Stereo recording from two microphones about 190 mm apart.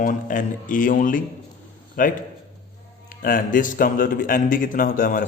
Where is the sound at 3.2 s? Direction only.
45° left (ahead or behind).